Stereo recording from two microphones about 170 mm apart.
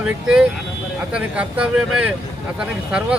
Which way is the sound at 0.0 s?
5° right (ahead or behind).